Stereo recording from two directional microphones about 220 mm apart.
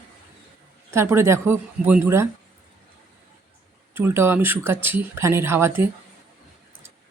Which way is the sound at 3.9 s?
10° right (ahead or behind).